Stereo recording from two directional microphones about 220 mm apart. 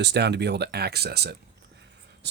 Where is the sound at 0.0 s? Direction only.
50° right (ahead or behind).